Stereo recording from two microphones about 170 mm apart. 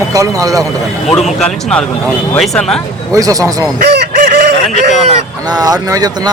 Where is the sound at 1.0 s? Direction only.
5° left (ahead or behind).